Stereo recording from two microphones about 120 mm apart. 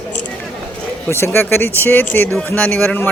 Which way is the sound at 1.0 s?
20° left (ahead or behind).